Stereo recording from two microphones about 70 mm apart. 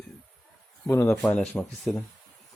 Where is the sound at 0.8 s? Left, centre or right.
Left.